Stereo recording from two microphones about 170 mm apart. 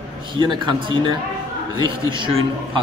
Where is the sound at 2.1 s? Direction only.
30° right (ahead or behind).